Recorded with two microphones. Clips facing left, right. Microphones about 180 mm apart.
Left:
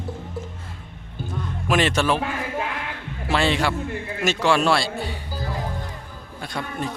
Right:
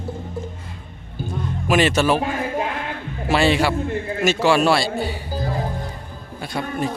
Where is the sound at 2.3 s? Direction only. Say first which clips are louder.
Right 4 dB; 35° right (ahead or behind).